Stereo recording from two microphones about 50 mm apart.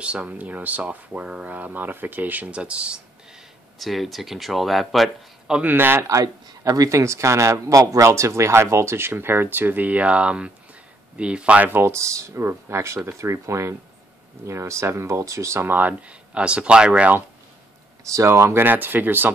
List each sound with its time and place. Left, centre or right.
0.0 s speech: right
3.7 s speech: centre
5.7 s speech: right
6.9 s speech: right
11.7 s speech: right
13.2 s speech: right
15.6 s speech: right
15.9 s speech: right
18.0 s speech: right
18.6 s speech: right